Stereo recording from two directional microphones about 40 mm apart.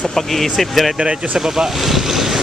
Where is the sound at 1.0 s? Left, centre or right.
Centre.